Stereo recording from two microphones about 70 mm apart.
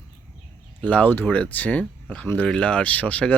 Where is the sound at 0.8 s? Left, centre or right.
Left.